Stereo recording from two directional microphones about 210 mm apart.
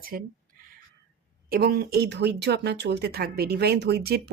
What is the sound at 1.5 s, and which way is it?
Speech, 45° right (ahead or behind).